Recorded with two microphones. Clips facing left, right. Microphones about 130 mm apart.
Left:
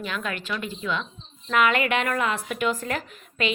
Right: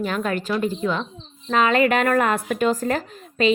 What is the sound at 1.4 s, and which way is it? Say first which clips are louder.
A woman's voice: right 4 dB; 30° right (ahead or behind).